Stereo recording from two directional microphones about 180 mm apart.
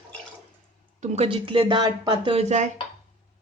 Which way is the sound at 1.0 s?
30° right (ahead or behind).